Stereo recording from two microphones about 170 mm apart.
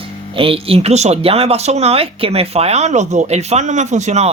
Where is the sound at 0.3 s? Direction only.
35° right (ahead or behind).